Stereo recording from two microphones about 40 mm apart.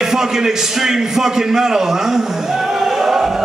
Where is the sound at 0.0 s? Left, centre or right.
Centre.